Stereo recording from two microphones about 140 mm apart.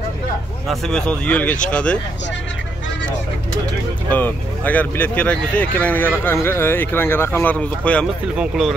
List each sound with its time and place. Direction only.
0.7 s speech: 5° left (ahead or behind)
4.1 s speech: 10° left (ahead or behind)
8.4 s speech: centre (ahead or behind)